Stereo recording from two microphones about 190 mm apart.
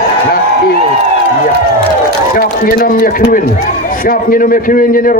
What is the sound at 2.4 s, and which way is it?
A man's voice, 50° left (ahead or behind).